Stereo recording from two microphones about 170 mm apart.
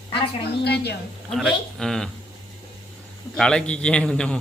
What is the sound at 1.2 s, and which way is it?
Speech, centre (ahead or behind).